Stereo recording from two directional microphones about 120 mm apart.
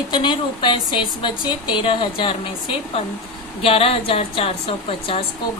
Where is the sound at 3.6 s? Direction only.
50° left (ahead or behind).